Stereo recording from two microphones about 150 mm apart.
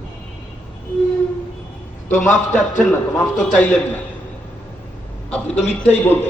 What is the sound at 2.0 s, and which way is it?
Speech, 15° left (ahead or behind).